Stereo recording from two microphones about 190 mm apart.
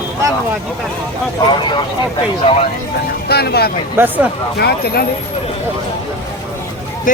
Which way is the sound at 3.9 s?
10° right (ahead or behind).